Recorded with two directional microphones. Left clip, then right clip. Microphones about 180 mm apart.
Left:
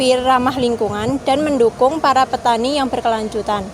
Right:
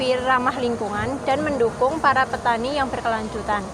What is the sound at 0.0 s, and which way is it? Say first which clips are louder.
Speech: left 6 dB; 70° left (ahead or behind).